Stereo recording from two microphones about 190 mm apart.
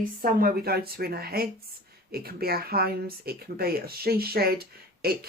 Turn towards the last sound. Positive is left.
turn(degrees=-55)  # may be behind; listen again after turning